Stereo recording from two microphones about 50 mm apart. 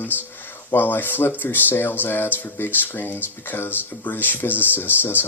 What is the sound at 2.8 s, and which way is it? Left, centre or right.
Speech, left.